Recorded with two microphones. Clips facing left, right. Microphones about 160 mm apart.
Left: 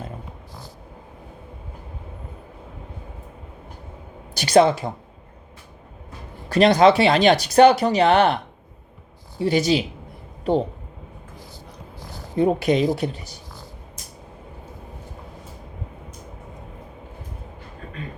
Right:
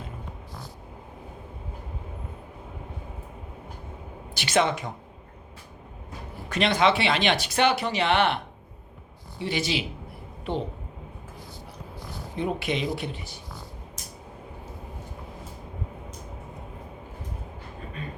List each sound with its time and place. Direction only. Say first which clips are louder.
4.4 s speech: left 8 dB; 35° left (ahead or behind)
6.5 s speech: left 8 dB; 40° left (ahead or behind)
9.4 s speech: left 9 dB; 40° left (ahead or behind)
12.4 s speech: left 9 dB; 40° left (ahead or behind)